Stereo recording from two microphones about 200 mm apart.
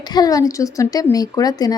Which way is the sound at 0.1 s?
20° left (ahead or behind).